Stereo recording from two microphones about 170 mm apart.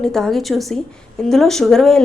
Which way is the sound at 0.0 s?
Centre (ahead or behind).